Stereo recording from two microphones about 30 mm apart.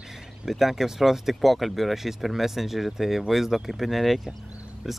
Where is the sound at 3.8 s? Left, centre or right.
Centre.